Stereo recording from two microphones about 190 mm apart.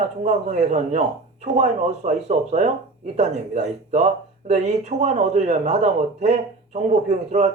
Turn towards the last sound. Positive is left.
turn(degrees=-35)  # may be behind; listen again after turning